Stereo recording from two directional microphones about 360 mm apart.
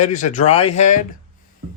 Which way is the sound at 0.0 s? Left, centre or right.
Left.